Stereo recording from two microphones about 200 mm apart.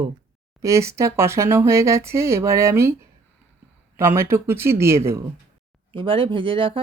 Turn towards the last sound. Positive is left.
turn(degrees=-25)  # may be behind; listen again after turning